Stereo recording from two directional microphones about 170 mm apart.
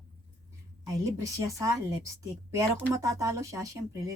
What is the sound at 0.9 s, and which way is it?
Speech, 20° right (ahead or behind).